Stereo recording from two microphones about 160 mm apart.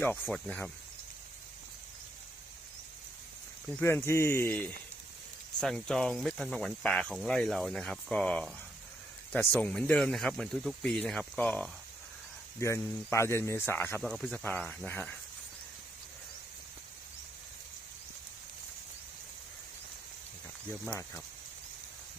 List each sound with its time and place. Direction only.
0.3 s speech: 5° left (ahead or behind)
3.7 s speech: 10° left (ahead or behind)
14.0 s speech: centre (ahead or behind)